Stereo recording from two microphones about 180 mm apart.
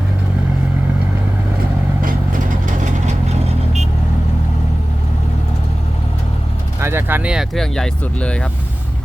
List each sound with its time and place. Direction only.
6.7 s speech: 15° right (ahead or behind); by 8.4 s 5° left (ahead or behind)